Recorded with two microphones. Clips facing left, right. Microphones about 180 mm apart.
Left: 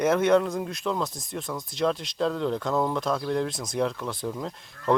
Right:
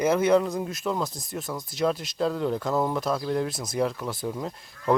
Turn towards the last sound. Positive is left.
turn(degrees=-5)  # may be behind; listen again after turning